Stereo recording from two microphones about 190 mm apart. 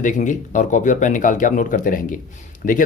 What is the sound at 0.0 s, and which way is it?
Speech, 40° left (ahead or behind).